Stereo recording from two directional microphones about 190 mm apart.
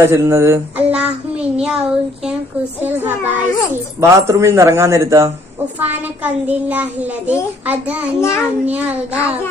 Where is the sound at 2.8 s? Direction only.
10° right (ahead or behind).